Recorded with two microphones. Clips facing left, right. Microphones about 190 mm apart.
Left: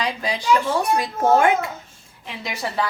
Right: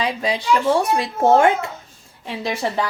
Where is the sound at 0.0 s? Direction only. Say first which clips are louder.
Right 3 dB; 25° right (ahead or behind).